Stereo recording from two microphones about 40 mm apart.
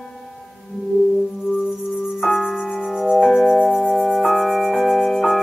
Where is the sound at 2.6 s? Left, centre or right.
Centre.